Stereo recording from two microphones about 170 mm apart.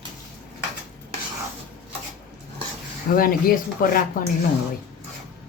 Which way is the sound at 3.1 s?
60° left (ahead or behind).